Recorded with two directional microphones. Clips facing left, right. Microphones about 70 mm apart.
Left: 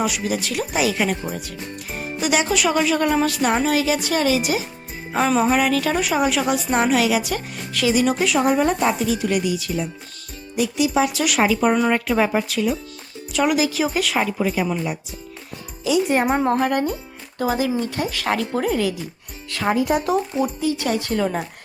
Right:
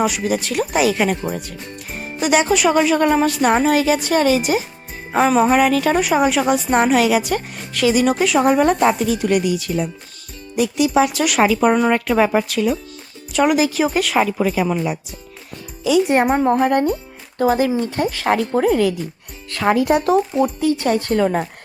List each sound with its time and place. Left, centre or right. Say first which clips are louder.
0.0 s speech: right 4 dB; right
2.2 s speech: right 4 dB; right
7.9 s speech: right 3 dB; right
13.3 s speech: right 3 dB; right
16.2 s a woman's voice: right 3 dB; centre
17.3 s speech: right 5 dB; right
19.6 s speech: right 4 dB; right
20.1 s speech: right 5 dB; right